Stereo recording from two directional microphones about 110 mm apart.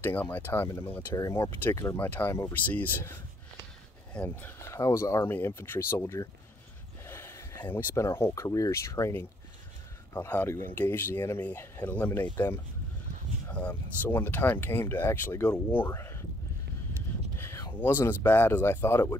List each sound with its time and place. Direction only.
0.0 s speech: 15° left (ahead or behind)
13.5 s speech: 10° left (ahead or behind)
17.4 s a sound: 25° left (ahead or behind)
17.7 s speech: 20° left (ahead or behind)